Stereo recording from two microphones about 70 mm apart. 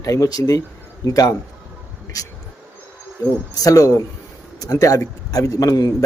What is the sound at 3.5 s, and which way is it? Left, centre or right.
Speech, left.